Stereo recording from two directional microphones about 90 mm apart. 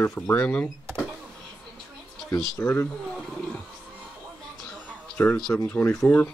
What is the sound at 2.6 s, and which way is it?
Speech, 25° left (ahead or behind).